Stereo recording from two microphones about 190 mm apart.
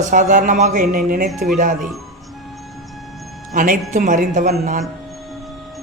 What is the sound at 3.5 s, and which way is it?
Speech, 45° right (ahead or behind).